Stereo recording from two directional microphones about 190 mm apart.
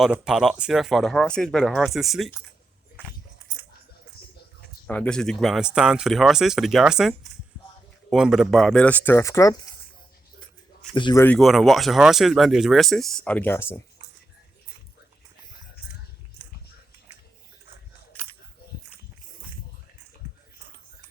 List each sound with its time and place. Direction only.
0.0 s speech: 5° right (ahead or behind)
4.9 s speech: 5° left (ahead or behind)
10.9 s speech: 25° left (ahead or behind)
11.2 s speech: 5° left (ahead or behind)